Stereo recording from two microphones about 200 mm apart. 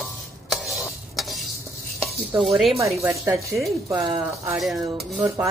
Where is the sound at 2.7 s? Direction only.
15° right (ahead or behind).